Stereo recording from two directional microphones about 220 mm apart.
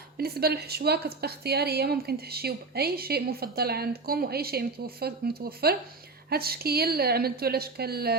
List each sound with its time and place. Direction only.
0.2 s a woman's voice: 45° right (ahead or behind)